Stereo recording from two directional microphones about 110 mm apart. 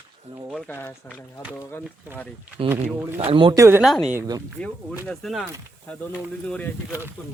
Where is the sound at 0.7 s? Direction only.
20° left (ahead or behind).